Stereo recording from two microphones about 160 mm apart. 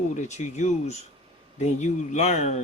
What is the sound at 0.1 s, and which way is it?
Speech, 45° left (ahead or behind).